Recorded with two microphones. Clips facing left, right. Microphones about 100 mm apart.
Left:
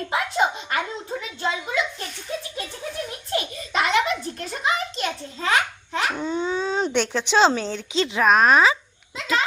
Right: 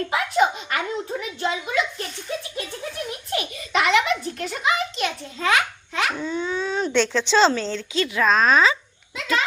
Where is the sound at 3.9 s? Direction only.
30° left (ahead or behind).